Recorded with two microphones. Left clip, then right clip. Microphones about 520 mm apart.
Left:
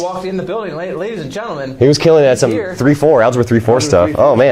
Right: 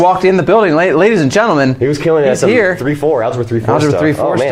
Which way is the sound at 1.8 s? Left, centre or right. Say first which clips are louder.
Left 3 dB; left.